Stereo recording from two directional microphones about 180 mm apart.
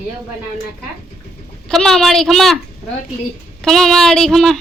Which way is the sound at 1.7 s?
Centre (ahead or behind).